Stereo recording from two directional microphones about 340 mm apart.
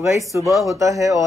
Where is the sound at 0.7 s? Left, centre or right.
Centre.